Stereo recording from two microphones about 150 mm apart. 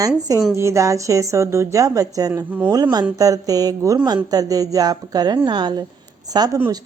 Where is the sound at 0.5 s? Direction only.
20° right (ahead or behind).